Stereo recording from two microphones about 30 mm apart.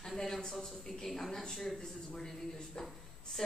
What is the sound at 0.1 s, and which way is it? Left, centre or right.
A man's voice, centre.